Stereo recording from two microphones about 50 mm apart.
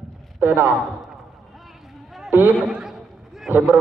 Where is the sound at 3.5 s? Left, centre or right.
Right.